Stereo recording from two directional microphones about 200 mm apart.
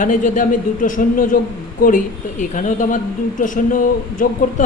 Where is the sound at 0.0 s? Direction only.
40° left (ahead or behind).